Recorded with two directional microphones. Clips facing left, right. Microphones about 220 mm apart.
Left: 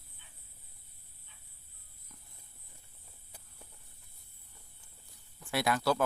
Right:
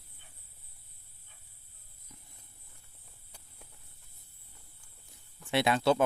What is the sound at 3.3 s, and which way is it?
Walk, 5° left (ahead or behind).